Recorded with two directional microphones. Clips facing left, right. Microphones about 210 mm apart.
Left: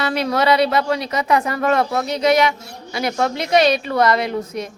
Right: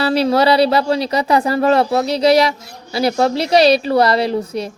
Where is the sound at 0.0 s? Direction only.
30° right (ahead or behind).